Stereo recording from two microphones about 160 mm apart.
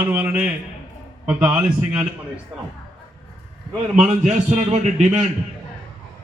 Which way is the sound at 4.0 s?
45° right (ahead or behind).